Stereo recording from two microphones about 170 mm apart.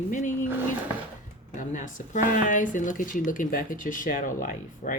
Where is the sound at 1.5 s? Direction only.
50° left (ahead or behind).